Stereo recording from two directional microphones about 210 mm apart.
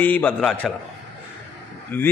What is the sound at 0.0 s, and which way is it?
Speech, 10° left (ahead or behind).